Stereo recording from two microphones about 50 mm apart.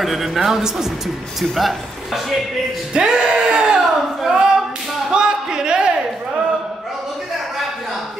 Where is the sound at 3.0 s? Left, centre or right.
Centre.